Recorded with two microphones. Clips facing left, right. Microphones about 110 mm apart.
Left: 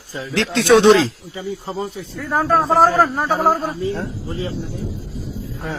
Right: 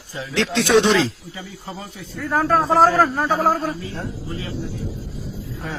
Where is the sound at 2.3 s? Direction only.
10° left (ahead or behind).